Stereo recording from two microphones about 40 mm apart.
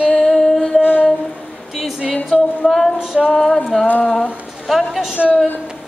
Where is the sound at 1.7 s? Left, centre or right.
Centre.